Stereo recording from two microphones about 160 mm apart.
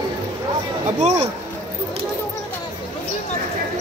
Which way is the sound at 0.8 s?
45° right (ahead or behind).